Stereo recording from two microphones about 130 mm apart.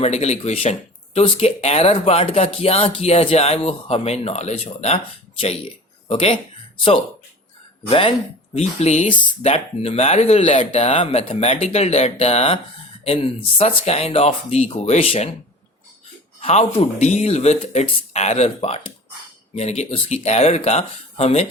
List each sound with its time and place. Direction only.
0.0 s speech: 55° left (ahead or behind)
6.1 s speech: 45° left (ahead or behind)
7.9 s speech: 45° left (ahead or behind)
8.5 s speech: 60° left (ahead or behind)
9.0 s speech: 40° left (ahead or behind)
9.4 s speech: 55° left (ahead or behind)
16.4 s speech: 50° left (ahead or behind)